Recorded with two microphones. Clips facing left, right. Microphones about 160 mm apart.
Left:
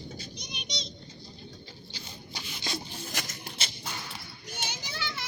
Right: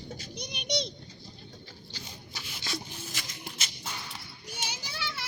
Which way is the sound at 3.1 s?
55° left (ahead or behind).